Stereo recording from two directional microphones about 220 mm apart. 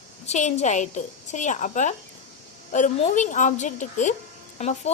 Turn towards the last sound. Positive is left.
turn(degrees=30)  # may be behind; listen again after turning